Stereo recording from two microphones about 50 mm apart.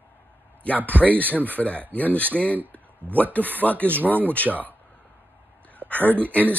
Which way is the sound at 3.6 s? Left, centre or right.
Left.